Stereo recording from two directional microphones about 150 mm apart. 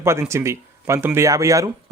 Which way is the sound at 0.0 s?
15° right (ahead or behind).